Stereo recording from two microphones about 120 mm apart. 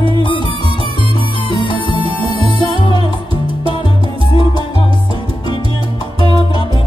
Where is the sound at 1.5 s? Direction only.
45° left (ahead or behind).